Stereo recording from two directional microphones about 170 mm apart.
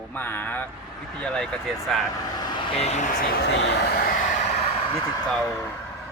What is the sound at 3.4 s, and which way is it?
Speech, 85° left.